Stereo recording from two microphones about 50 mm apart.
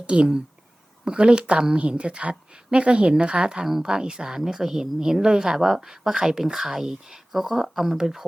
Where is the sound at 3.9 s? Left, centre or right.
Centre.